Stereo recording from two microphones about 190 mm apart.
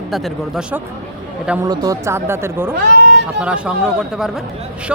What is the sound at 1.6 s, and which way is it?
Speech, 20° right (ahead or behind).